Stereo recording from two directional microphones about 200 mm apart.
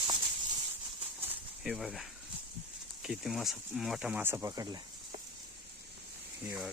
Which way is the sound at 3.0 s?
Centre (ahead or behind).